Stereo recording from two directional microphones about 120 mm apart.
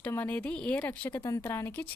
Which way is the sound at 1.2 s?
25° left (ahead or behind).